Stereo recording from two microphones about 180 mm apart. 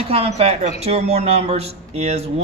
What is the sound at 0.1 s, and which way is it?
A man's voice, 35° right (ahead or behind).